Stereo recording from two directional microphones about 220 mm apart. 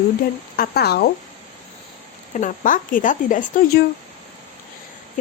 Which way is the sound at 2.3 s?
35° left (ahead or behind).